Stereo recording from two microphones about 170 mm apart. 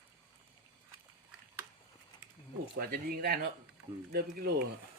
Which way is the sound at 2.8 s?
65° right (ahead or behind).